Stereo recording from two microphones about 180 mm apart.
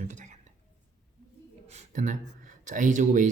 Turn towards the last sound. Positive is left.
turn(degrees=-45)  # may be behind; listen again after turning